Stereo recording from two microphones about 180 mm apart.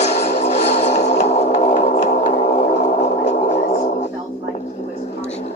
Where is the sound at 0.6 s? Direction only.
40° left (ahead or behind).